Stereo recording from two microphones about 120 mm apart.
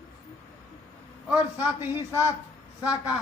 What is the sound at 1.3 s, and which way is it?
Speech, 15° right (ahead or behind).